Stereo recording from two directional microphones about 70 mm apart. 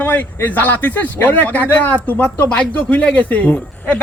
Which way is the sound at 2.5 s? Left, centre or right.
Centre.